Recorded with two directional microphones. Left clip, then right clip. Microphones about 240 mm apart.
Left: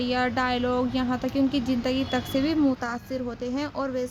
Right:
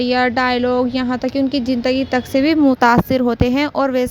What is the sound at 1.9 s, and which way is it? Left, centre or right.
Speech, right.